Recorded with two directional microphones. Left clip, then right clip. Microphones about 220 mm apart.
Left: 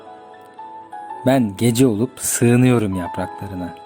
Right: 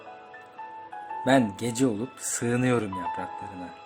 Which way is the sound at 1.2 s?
40° left (ahead or behind).